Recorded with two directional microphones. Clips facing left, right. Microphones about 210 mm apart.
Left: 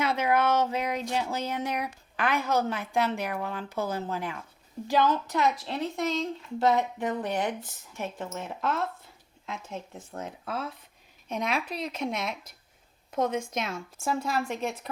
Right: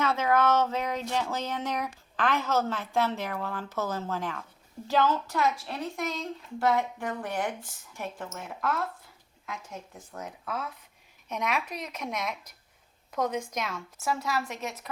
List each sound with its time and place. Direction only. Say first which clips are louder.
0.0 s speech: even; 15° left (ahead or behind); by 14.8 s 30° left (ahead or behind)